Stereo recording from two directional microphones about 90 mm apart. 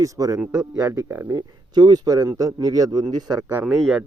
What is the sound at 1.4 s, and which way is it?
Speech, 50° right (ahead or behind).